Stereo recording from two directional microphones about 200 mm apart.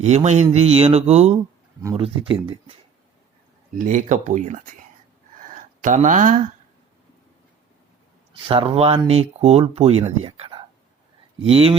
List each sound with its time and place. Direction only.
0.0 s speech: 35° right (ahead or behind)
3.8 s speech: 40° right (ahead or behind)
5.5 s a sound: 40° right (ahead or behind)
8.3 s speech: 25° right (ahead or behind)